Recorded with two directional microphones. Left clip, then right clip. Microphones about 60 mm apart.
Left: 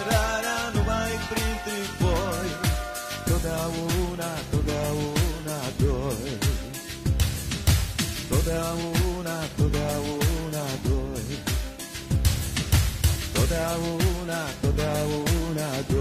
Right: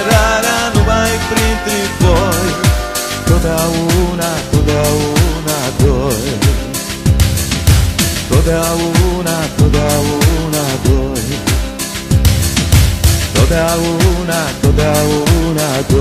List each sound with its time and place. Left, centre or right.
0.0 s music: right
9.7 s music: right
14.8 s music: right